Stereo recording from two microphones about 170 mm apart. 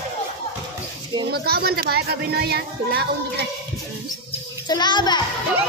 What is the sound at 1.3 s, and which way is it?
Speech, 65° right (ahead or behind).